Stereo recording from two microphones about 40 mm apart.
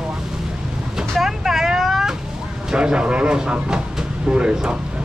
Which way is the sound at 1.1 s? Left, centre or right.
Centre.